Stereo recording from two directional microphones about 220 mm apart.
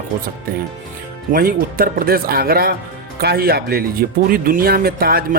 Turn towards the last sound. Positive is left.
turn(degrees=-45)  # may be behind; listen again after turning